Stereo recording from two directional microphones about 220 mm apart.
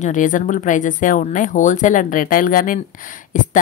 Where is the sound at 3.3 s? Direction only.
35° left (ahead or behind).